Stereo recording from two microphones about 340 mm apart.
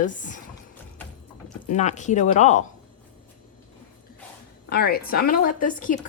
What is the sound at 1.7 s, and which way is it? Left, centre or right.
Speech, left.